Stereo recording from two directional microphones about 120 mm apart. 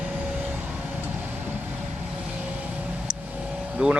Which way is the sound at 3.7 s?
10° right (ahead or behind).